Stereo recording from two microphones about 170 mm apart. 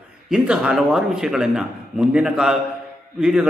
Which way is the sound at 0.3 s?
5° right (ahead or behind).